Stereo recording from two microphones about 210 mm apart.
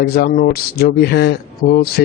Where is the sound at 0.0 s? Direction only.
50° left (ahead or behind).